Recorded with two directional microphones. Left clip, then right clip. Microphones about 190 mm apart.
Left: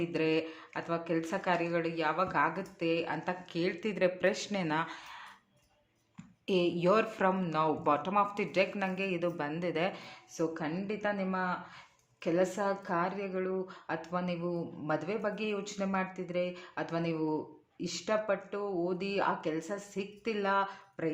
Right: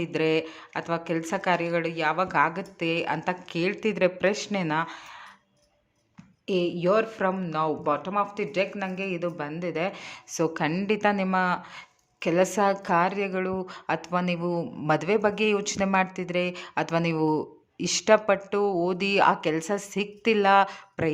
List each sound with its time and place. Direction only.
0.0 s speech: 25° right (ahead or behind)
6.5 s speech: 15° right (ahead or behind)
10.0 s a woman's voice: 40° right (ahead or behind)